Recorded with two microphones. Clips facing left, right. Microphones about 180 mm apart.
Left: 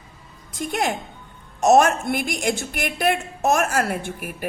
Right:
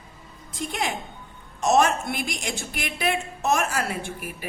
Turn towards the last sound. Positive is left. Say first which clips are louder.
# left 4 dB
turn(degrees=50)  # may be behind; listen again after turning